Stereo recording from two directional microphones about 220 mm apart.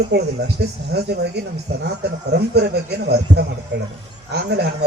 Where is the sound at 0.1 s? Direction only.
50° right (ahead or behind).